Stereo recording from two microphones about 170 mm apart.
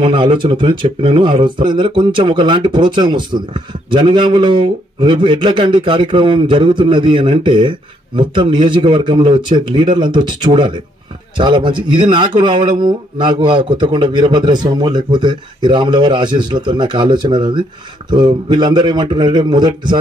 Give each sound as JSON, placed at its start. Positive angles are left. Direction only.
{"t": 0.0, "sound": "speech", "side_deg": -30}